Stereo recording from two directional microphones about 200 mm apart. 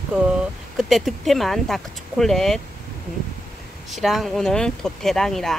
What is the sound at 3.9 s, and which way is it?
Speech, centre (ahead or behind).